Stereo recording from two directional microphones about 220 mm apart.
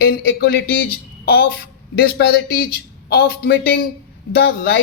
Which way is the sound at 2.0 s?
45° left (ahead or behind).